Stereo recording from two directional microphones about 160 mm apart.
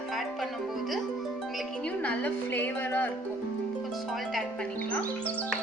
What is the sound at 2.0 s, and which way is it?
A woman's voice, 10° left (ahead or behind).